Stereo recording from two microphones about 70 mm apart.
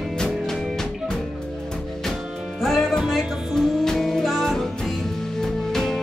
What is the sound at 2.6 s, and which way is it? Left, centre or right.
Music, centre.